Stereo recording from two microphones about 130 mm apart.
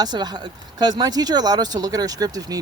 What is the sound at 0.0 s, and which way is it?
Speech, 30° right (ahead or behind).